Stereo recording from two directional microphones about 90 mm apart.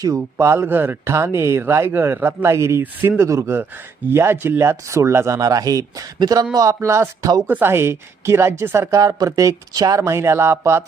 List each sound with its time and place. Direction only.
0.0 s speech: 35° right (ahead or behind)
6.7 s speech: 30° right (ahead or behind)
7.4 s speech: 20° right (ahead or behind)
9.0 s speech: 45° right (ahead or behind)